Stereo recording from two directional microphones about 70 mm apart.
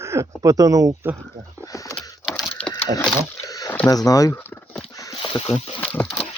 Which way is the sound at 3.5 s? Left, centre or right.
Left.